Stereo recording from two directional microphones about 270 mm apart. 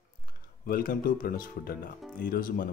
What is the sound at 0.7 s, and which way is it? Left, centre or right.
Speech, left.